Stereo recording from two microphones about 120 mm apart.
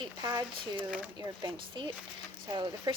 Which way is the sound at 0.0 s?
30° right (ahead or behind).